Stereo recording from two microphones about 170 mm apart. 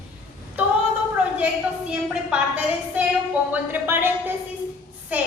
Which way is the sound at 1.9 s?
5° right (ahead or behind).